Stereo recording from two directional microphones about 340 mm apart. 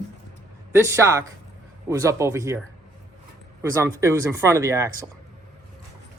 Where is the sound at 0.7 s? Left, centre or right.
Centre.